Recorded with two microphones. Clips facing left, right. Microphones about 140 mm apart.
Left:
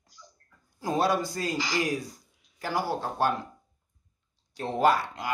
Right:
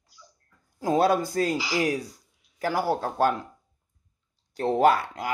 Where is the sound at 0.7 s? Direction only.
55° right (ahead or behind).